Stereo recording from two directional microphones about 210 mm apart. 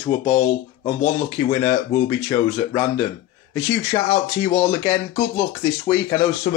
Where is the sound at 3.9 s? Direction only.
35° left (ahead or behind).